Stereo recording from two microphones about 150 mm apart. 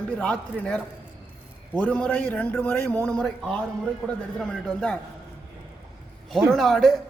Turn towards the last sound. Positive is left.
turn(degrees=0)  # may be behind; listen again after turning